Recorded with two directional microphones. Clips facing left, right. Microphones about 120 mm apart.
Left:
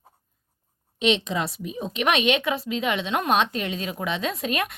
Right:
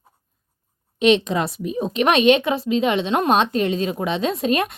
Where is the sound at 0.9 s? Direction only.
50° right (ahead or behind).